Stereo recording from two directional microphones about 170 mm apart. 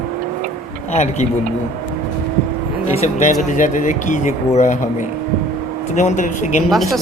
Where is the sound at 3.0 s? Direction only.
45° left (ahead or behind).